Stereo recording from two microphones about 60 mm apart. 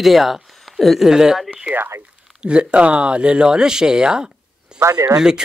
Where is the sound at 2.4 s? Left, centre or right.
Centre.